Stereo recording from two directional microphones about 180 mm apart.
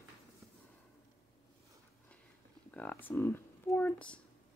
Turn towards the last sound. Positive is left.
turn(degrees=5)  # may be behind; listen again after turning